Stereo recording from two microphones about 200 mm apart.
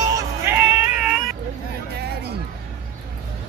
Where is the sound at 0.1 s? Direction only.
10° right (ahead or behind).